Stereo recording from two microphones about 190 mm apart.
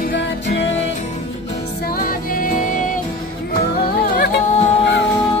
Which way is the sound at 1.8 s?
50° left (ahead or behind).